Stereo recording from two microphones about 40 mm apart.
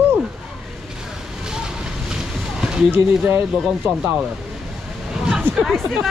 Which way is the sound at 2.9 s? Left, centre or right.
Right.